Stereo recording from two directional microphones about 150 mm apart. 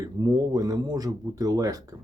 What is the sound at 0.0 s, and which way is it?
Speech, 25° right (ahead or behind).